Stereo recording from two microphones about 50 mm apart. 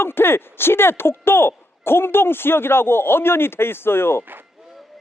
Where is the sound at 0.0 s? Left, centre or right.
Left.